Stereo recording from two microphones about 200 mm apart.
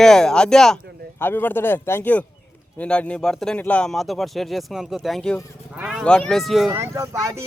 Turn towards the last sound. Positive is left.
turn(degrees=-15)  # may be behind; listen again after turning